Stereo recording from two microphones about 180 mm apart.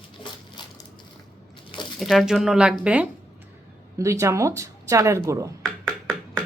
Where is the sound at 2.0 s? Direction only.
Centre (ahead or behind); by 5.5 s 15° right (ahead or behind).